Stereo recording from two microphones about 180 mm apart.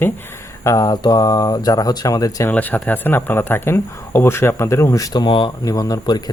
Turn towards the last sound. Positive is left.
turn(degrees=20)  # may be behind; listen again after turning